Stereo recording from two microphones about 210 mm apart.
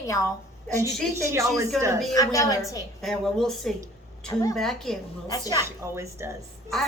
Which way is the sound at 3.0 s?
Centre (ahead or behind).